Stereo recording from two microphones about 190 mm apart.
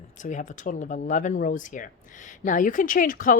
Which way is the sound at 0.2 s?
40° left (ahead or behind).